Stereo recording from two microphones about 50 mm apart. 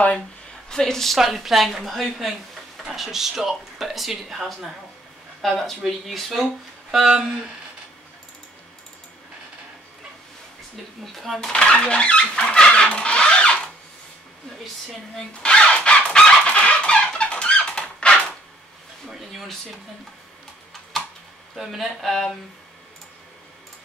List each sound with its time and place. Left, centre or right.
0.7 s a woman's voice: centre
1.1 s speech: centre
5.9 s speech: centre
11.5 s a sound: left
15.4 s a sound: centre
19.0 s speech: centre
21.5 s speech: centre